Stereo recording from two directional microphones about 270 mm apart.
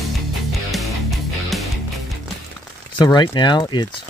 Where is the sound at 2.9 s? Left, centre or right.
Centre.